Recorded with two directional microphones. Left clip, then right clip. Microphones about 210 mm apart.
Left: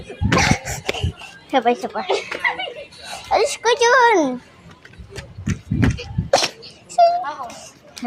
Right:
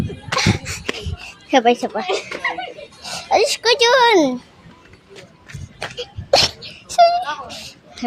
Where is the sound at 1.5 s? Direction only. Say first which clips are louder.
Right 3 dB; 25° right (ahead or behind).